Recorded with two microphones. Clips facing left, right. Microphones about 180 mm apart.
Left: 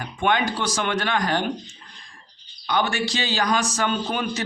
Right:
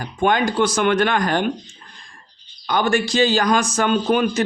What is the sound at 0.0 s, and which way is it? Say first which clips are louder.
A man's voice: right 4 dB; 40° right (ahead or behind).